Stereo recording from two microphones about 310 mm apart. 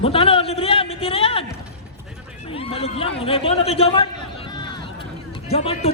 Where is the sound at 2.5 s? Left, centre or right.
Centre.